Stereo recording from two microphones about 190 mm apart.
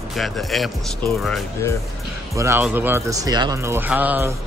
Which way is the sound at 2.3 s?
15° right (ahead or behind).